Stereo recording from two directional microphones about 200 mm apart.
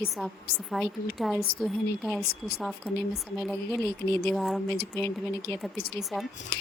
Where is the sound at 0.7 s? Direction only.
Centre (ahead or behind).